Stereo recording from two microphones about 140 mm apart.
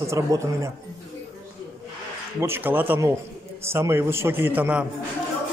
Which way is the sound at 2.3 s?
15° right (ahead or behind).